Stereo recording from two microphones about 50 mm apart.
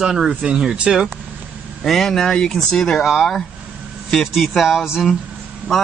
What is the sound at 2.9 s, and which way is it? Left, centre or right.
Speech, centre.